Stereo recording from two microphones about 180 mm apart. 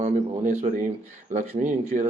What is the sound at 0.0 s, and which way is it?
A man's voice, 40° right (ahead or behind).